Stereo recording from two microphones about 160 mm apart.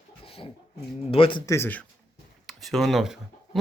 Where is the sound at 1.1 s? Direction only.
35° left (ahead or behind).